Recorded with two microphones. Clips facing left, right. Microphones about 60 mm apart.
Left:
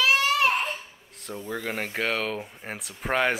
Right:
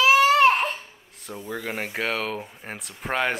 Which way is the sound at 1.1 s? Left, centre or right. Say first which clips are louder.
Even; centre.